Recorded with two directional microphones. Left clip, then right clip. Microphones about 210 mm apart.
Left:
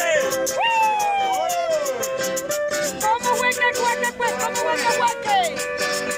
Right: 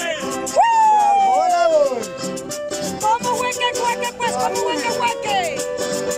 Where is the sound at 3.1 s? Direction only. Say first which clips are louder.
Right 1 dB; 5° right (ahead or behind).